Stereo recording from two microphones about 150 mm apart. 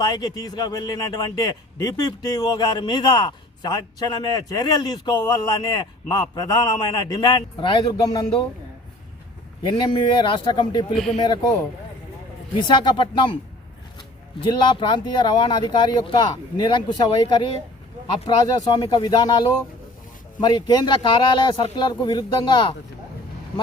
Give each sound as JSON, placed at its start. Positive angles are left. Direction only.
{"t": 0.0, "sound": "a man's voice", "side_deg": 30}
{"t": 9.6, "sound": "speech", "side_deg": 30}
{"t": 10.9, "sound": "speech", "side_deg": 0}
{"t": 12.7, "sound": "speech", "side_deg": 30}
{"t": 14.4, "sound": "speech", "side_deg": 30}
{"t": 18.6, "sound": "a man's voice", "side_deg": 30}